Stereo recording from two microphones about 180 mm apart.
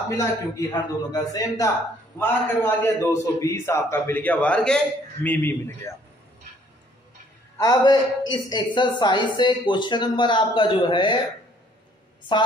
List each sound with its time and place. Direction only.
0.1 s a man's voice: 15° left (ahead or behind)
7.5 s a man's voice: 15° left (ahead or behind)